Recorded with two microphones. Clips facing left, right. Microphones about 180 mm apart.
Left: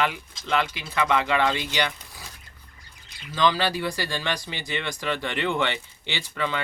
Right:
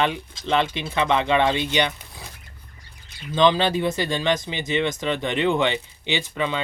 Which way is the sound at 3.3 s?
20° right (ahead or behind).